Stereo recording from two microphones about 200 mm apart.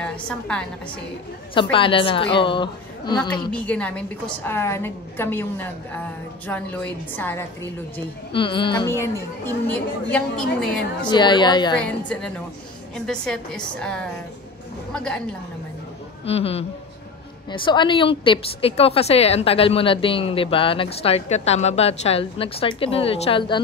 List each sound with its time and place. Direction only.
0.0 s a woman's voice: 5° left (ahead or behind)
1.5 s a woman's voice: 25° left (ahead or behind)
3.5 s a woman's voice: 5° left (ahead or behind)
8.3 s a woman's voice: 25° left (ahead or behind); by 10.7 s 5° left (ahead or behind)
11.1 s a woman's voice: 20° left (ahead or behind)
11.8 s a woman's voice: 5° left (ahead or behind)
16.3 s a woman's voice: 30° left (ahead or behind)